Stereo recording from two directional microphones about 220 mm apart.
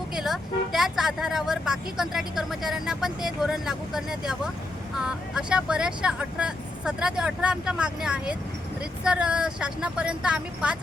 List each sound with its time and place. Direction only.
0.2 s speech: centre (ahead or behind)